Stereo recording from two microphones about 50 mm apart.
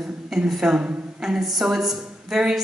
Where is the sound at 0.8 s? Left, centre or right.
Right.